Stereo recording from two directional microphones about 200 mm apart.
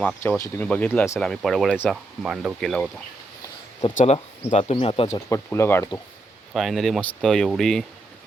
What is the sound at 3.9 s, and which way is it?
Speech, 30° left (ahead or behind).